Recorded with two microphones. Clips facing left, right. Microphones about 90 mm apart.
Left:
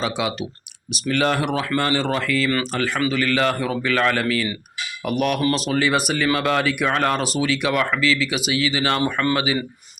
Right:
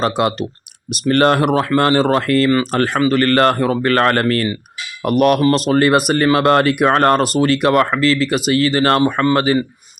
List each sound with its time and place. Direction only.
0.0 s speech: 50° right (ahead or behind)